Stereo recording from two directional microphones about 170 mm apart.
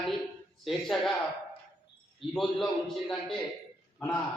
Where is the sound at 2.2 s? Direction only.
Centre (ahead or behind).